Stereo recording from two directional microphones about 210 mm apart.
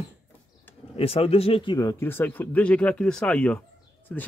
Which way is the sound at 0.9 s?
30° left (ahead or behind).